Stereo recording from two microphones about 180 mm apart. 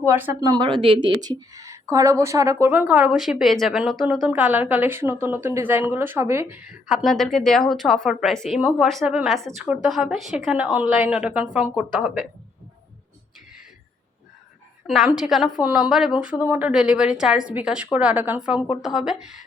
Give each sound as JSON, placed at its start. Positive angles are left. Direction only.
{"t": 0.0, "sound": "speech", "side_deg": -10}
{"t": 0.5, "sound": "a woman's voice", "side_deg": -25}
{"t": 6.8, "sound": "a woman's voice", "side_deg": 0}
{"t": 14.8, "sound": "a woman's voice", "side_deg": 0}